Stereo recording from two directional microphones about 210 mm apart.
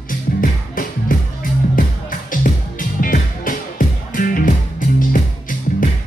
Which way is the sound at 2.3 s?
40° left (ahead or behind).